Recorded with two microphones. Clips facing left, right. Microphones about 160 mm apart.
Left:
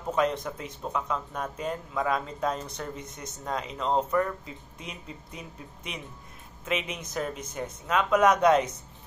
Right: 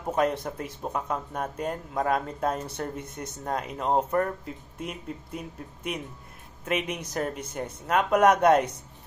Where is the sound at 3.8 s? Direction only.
10° right (ahead or behind).